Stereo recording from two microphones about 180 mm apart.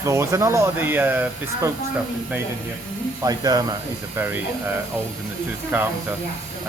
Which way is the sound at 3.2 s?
20° right (ahead or behind).